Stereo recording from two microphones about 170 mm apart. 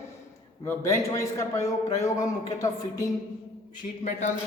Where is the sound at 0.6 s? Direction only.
20° left (ahead or behind).